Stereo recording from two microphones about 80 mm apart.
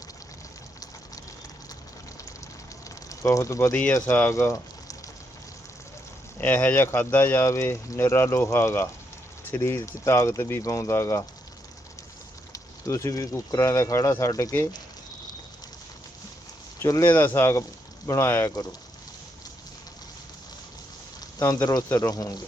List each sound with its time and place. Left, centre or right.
2.9 s speech: left
6.4 s speech: left
12.5 s vehicle: left
13.6 s speech: left
17.0 s speech: left
21.4 s speech: left